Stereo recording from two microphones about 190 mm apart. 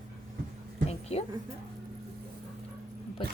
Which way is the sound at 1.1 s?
35° left (ahead or behind).